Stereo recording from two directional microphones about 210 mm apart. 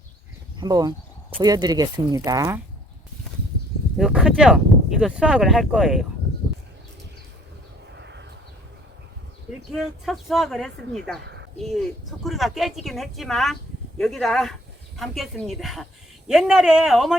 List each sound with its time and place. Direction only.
0.6 s speech: 20° right (ahead or behind)
3.9 s a woman's voice: centre (ahead or behind)
7.9 s a sound: 55° right (ahead or behind)
9.6 s a woman's voice: centre (ahead or behind)